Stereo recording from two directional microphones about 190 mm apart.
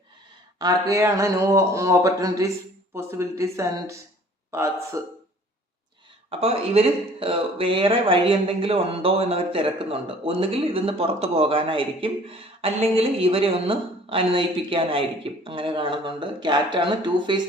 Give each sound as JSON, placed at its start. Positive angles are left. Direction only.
{"t": 0.6, "sound": "speech", "side_deg": -15}
{"t": 6.3, "sound": "speech", "side_deg": -30}